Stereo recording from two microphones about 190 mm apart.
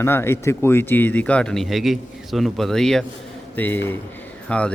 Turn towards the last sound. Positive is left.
turn(degrees=5)  # may be behind; listen again after turning